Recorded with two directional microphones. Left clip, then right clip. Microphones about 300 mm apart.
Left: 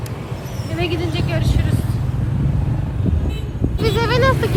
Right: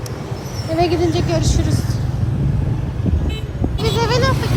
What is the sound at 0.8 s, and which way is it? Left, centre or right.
Speech, centre.